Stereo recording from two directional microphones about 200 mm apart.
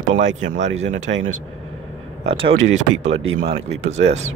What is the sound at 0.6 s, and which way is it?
Speech, 70° right (ahead or behind).